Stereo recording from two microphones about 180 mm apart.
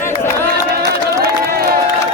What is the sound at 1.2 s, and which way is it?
Crowd, 60° right (ahead or behind).